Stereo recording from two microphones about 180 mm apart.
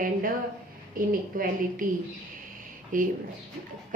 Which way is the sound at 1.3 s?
50° right (ahead or behind).